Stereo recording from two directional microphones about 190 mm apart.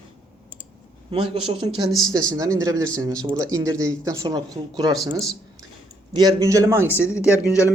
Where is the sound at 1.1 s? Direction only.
25° right (ahead or behind).